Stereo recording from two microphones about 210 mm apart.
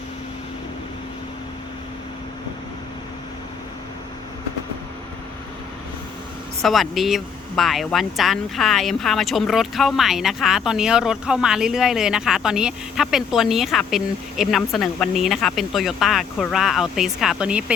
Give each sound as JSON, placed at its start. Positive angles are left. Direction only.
{"t": 6.6, "sound": "speech", "side_deg": 0}